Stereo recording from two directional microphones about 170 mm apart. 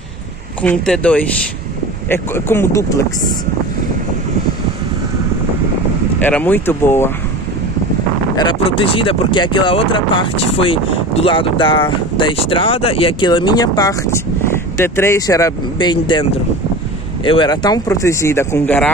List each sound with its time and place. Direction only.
0.6 s speech: 5° left (ahead or behind)
6.2 s speech: 10° left (ahead or behind)
8.4 s speech: 30° left (ahead or behind); by 18.9 s 10° left (ahead or behind)